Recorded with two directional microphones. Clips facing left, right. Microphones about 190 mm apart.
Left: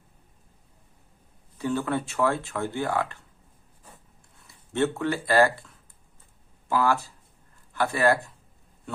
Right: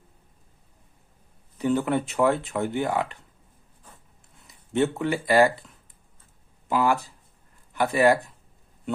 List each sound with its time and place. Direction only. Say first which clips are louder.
1.5 s speech: right 4 dB; 20° right (ahead or behind)
4.4 s speech: right 2 dB; 15° right (ahead or behind)
6.7 s speech: right 1 dB; 15° right (ahead or behind)